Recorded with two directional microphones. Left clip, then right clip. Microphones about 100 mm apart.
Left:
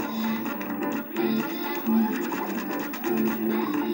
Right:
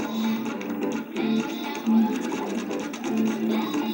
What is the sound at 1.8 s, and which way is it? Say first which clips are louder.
Sewing machine: right 3 dB; 15° right (ahead or behind).